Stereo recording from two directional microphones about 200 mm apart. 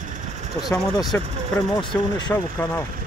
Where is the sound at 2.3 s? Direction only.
10° left (ahead or behind).